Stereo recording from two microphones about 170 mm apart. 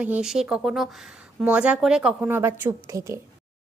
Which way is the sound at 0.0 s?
5° right (ahead or behind).